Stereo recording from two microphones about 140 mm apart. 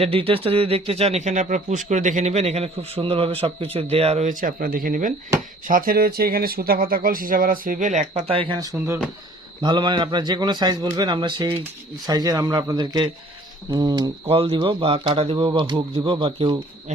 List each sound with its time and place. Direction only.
0.0 s speech: 45° right (ahead or behind)
4.4 s speech: 85° right; by 8.4 s 60° right (ahead or behind)
8.4 s a man's voice: 30° right (ahead or behind)
14.3 s speech: 40° right (ahead or behind)